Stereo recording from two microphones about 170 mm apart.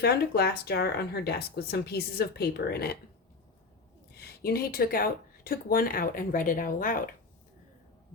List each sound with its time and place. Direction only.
0.0 s speech: 75° left (ahead or behind)
4.2 s speech: 65° left (ahead or behind)